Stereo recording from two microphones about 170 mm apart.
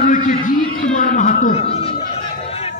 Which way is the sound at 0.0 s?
50° left (ahead or behind).